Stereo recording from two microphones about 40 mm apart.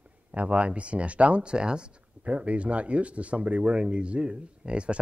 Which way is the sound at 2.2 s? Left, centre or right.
Right.